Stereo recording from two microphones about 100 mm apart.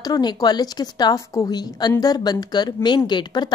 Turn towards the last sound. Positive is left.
turn(degrees=45)  # may be behind; listen again after turning